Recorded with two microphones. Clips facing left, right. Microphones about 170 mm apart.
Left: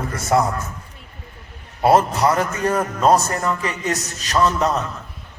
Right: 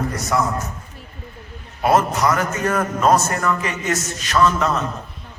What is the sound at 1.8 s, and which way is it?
A man's voice, 30° left (ahead or behind).